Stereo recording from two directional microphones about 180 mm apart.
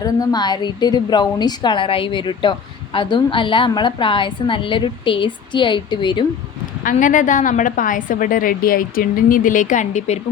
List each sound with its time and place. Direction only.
0.0 s a woman's voice: 20° left (ahead or behind)
6.8 s a woman's voice: 45° left (ahead or behind)